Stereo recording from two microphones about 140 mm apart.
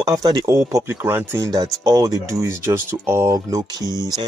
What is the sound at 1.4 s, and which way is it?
Speech, 25° right (ahead or behind).